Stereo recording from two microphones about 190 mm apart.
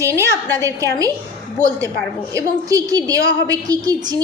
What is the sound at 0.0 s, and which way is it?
Speech, 15° right (ahead or behind).